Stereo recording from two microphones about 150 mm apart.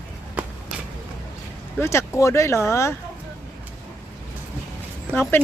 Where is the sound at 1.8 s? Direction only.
20° left (ahead or behind).